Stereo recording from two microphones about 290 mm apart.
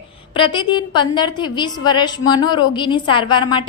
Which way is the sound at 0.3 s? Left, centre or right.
Centre.